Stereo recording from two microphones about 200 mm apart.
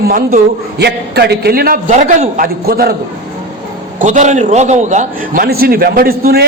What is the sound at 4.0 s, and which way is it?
A man's voice, 40° right (ahead or behind).